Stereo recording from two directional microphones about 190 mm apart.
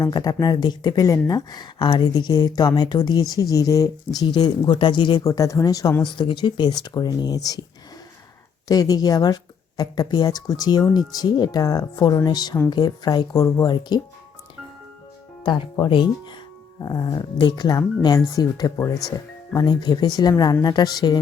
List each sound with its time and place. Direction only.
0.0 s speech: 20° left (ahead or behind)
8.6 s speech: 20° left (ahead or behind)
15.4 s speech: 20° left (ahead or behind)